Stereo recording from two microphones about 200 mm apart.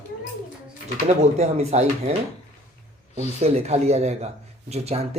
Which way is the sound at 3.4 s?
30° right (ahead or behind).